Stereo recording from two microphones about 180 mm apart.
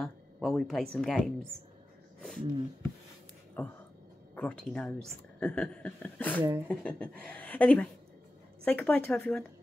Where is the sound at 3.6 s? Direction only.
10° left (ahead or behind).